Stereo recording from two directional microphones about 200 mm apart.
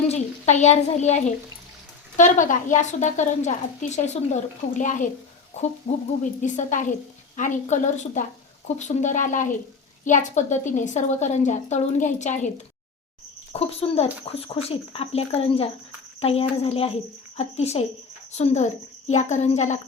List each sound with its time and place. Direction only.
0.1 s a child's voice: 35° left (ahead or behind)
13.5 s a woman's voice: 30° left (ahead or behind)